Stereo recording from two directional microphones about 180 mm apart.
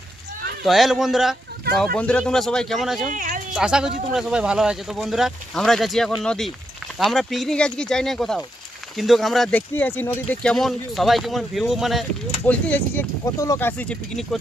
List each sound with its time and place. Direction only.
0.6 s speech: centre (ahead or behind)
3.1 s speech: 45° right (ahead or behind)
3.5 s speech: 5° right (ahead or behind)
12.5 s speech: 10° left (ahead or behind)